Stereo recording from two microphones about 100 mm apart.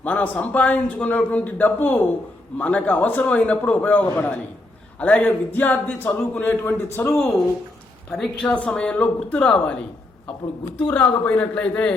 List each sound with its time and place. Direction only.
0.0 s a man's voice: 15° left (ahead or behind)
8.1 s a woman's voice: 5° left (ahead or behind)
10.8 s a man's voice: 15° left (ahead or behind)